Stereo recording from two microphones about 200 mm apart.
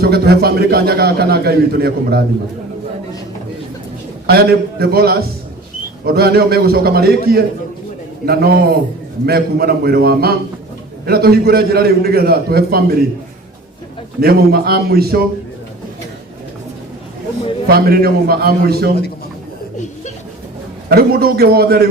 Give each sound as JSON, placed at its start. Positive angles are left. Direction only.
{"t": 0.0, "sound": "a man's voice", "side_deg": -50}
{"t": 4.3, "sound": "a man's voice", "side_deg": -50}
{"t": 14.2, "sound": "a man's voice", "side_deg": -50}
{"t": 17.7, "sound": "a man's voice", "side_deg": -50}
{"t": 20.9, "sound": "a man's voice", "side_deg": -50}